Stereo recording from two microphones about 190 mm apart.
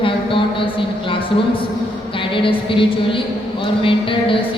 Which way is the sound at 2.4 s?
25° left (ahead or behind).